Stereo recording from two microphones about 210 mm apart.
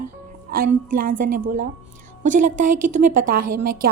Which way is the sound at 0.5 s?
45° right (ahead or behind).